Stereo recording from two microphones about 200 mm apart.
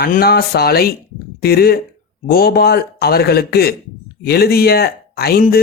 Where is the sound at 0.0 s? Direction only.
50° left (ahead or behind).